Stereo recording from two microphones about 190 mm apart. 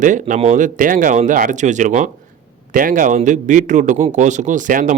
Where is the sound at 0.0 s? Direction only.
40° right (ahead or behind).